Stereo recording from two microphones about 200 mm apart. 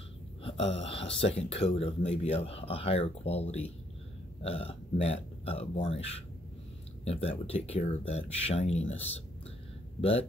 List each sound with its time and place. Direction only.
0.4 s speech: 25° left (ahead or behind)
7.1 s speech: 30° left (ahead or behind)